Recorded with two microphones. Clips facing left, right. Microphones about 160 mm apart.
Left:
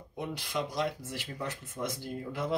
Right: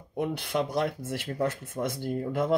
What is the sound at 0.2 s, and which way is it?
Speech, 55° right (ahead or behind).